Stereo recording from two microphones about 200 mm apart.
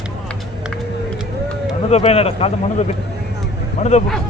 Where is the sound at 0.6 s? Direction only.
Centre (ahead or behind).